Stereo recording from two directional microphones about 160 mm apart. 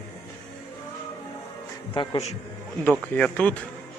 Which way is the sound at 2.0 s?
35° left (ahead or behind).